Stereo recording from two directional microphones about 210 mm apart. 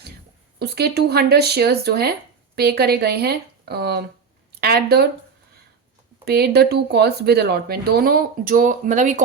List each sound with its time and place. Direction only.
0.6 s speech: 50° right (ahead or behind)
6.2 s speech: 50° right (ahead or behind)